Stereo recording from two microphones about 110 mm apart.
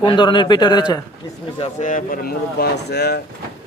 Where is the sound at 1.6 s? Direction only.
70° left (ahead or behind).